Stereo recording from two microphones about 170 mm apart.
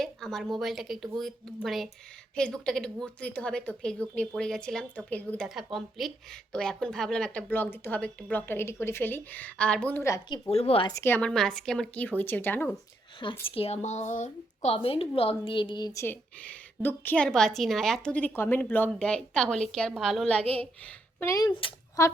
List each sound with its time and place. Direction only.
0.0 s a woman's voice: 5° left (ahead or behind)
10.5 s speech: 35° left (ahead or behind)
10.9 s a woman's voice: 15° left (ahead or behind)
13.5 s a woman's voice: 35° left (ahead or behind); by 20.7 s 10° left (ahead or behind)
21.2 s speech: 20° left (ahead or behind)